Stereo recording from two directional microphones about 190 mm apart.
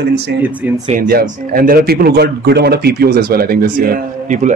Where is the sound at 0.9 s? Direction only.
50° right (ahead or behind).